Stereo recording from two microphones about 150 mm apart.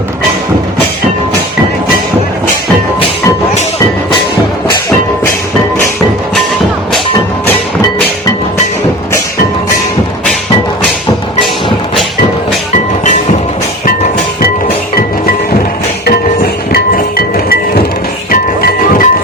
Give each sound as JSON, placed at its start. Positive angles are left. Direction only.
{"t": 16.0, "sound": "music", "side_deg": 90}